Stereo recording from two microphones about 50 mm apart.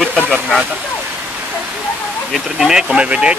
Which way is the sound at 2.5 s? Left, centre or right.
Centre.